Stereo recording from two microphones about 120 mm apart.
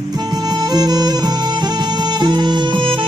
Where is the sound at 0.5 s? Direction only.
35° right (ahead or behind).